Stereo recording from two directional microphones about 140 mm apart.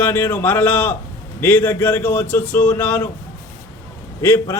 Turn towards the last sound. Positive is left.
turn(degrees=15)  # may be behind; listen again after turning